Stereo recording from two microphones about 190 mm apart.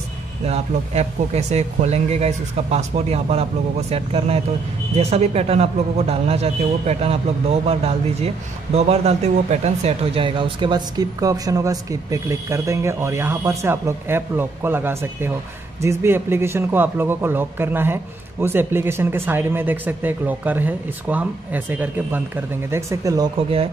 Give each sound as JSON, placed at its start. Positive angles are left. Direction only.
{"t": 0.5, "sound": "a man's voice", "side_deg": -35}